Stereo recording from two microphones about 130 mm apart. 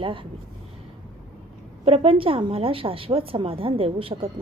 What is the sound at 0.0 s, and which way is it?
Speech, 40° right (ahead or behind).